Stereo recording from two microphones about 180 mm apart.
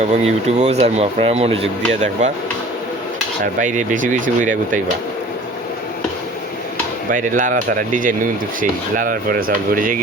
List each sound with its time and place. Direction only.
0.1 s speech: 40° right (ahead or behind)
3.6 s speech: 45° right (ahead or behind)
7.1 s speech: 45° right (ahead or behind)